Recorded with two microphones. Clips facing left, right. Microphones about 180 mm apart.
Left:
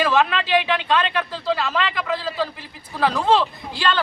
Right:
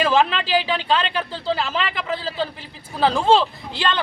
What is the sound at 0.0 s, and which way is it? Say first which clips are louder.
Speech: right 1 dB; 30° right (ahead or behind).